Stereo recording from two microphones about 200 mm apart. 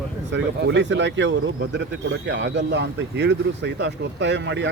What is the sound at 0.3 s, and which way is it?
Speech, 65° right (ahead or behind).